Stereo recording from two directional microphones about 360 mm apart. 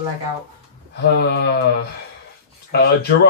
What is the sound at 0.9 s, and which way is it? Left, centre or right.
Speech, left.